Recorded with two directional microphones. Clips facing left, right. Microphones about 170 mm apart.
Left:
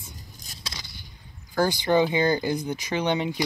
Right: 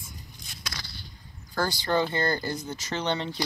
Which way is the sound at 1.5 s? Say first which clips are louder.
Left 5 dB; 15° left (ahead or behind).